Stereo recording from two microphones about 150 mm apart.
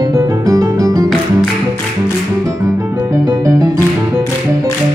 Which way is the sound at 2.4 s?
20° right (ahead or behind).